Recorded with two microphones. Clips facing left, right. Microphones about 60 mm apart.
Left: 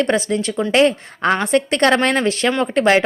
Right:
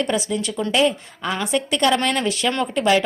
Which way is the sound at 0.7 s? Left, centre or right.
Left.